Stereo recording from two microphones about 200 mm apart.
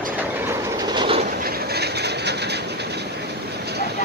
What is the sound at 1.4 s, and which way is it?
Train, 55° right (ahead or behind).